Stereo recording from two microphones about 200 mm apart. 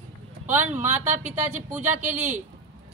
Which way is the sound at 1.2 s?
10° right (ahead or behind).